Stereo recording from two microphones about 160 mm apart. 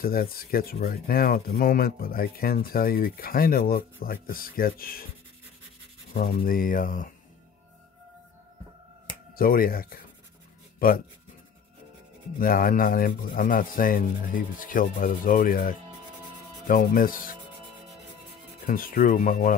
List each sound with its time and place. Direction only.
0.0 s speech: 70° left (ahead or behind)
6.1 s rub: 60° left (ahead or behind)
9.3 s rub: 65° left (ahead or behind)
12.4 s rub: 65° left (ahead or behind)
18.7 s rub: 65° left (ahead or behind)